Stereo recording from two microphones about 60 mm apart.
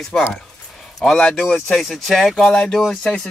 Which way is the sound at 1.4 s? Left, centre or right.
Centre.